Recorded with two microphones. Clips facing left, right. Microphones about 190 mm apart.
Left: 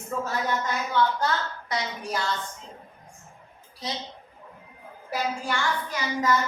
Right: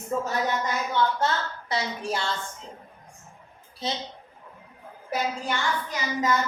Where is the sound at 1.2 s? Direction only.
30° right (ahead or behind).